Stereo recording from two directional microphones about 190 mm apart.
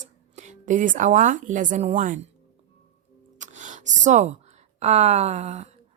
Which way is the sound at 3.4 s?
40° right (ahead or behind).